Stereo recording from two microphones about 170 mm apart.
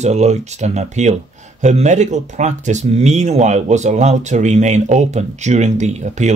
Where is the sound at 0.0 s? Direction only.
40° right (ahead or behind).